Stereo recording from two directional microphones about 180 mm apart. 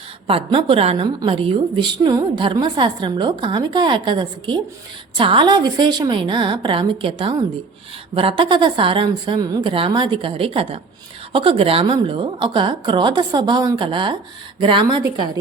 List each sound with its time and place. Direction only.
0.3 s a woman's voice: 30° right (ahead or behind)